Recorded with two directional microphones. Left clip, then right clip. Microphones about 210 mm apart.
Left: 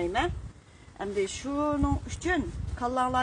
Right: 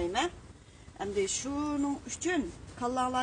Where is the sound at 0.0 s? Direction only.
20° left (ahead or behind).